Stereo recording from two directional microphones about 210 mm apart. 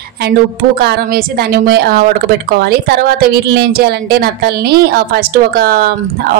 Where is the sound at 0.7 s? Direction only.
50° right (ahead or behind).